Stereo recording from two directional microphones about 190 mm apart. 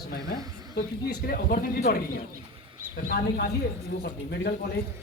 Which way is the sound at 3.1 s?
50° left (ahead or behind).